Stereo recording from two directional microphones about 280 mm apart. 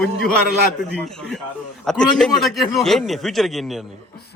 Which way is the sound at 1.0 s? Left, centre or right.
Centre.